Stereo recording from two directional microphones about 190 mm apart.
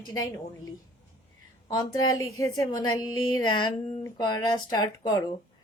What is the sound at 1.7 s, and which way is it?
A woman's voice, 20° left (ahead or behind).